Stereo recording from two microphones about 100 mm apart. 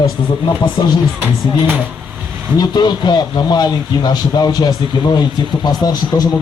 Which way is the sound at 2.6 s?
45° left (ahead or behind).